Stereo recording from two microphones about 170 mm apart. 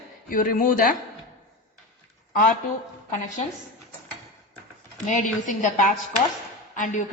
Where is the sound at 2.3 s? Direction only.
50° left (ahead or behind).